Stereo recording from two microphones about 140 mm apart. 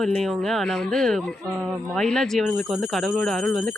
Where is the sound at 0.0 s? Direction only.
5° left (ahead or behind).